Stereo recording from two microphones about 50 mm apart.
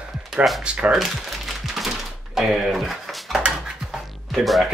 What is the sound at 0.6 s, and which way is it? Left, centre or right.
Speech, right.